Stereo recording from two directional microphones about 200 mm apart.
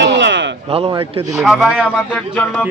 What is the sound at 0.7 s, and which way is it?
Speech, 30° right (ahead or behind).